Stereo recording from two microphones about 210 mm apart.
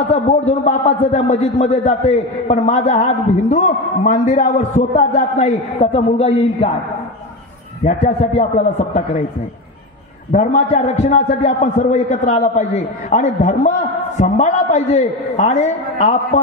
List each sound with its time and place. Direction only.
0.1 s a man's voice: 30° left (ahead or behind)
7.8 s a man's voice: 40° left (ahead or behind)
10.3 s a man's voice: 35° left (ahead or behind)